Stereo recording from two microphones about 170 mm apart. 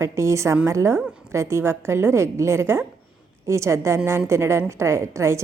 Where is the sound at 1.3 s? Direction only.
15° right (ahead or behind).